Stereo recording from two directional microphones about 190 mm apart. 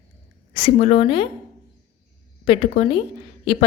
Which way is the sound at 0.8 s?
30° left (ahead or behind).